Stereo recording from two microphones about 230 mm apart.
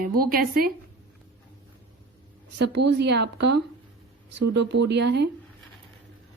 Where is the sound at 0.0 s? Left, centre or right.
Right.